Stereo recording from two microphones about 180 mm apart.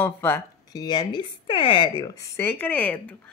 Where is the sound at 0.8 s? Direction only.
25° left (ahead or behind).